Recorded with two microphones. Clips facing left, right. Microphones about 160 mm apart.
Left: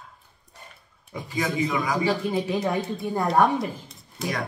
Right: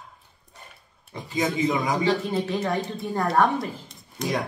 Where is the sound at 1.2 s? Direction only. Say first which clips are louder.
Right 2 dB; 20° right (ahead or behind).